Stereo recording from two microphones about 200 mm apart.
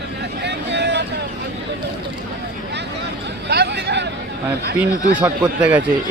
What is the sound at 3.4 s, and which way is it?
Speech, 55° right (ahead or behind).